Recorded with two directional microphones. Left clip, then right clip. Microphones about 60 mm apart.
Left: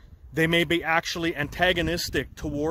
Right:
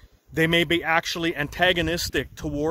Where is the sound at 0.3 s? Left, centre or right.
Centre.